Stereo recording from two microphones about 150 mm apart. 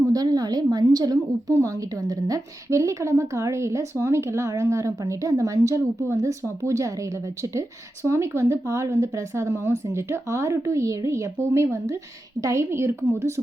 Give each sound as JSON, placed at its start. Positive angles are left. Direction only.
{"t": 0.0, "sound": "a woman's voice", "side_deg": -25}
{"t": 8.0, "sound": "a woman's voice", "side_deg": -20}